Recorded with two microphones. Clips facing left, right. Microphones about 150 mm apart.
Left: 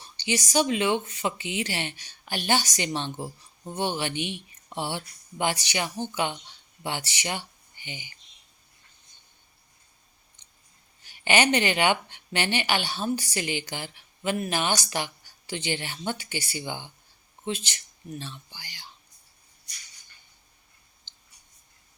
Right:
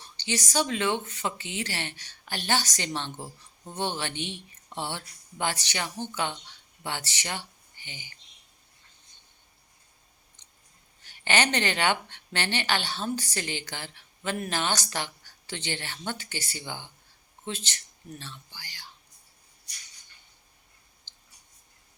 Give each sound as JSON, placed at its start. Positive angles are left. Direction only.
{"t": 0.2, "sound": "a woman's voice", "side_deg": 15}
{"t": 11.0, "sound": "a woman's voice", "side_deg": 15}
{"t": 21.1, "sound": "a sound", "side_deg": 20}